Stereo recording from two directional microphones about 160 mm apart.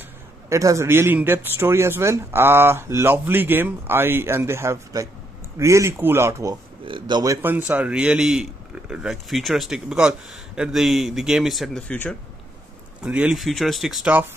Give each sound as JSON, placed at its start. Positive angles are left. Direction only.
{"t": 0.5, "sound": "speech", "side_deg": -20}
{"t": 6.8, "sound": "speech", "side_deg": -30}
{"t": 7.4, "sound": "speech", "side_deg": -10}
{"t": 13.0, "sound": "speech", "side_deg": -5}